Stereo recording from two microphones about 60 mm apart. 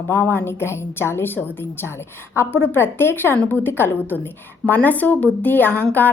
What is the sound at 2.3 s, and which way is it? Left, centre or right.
A woman's voice, left.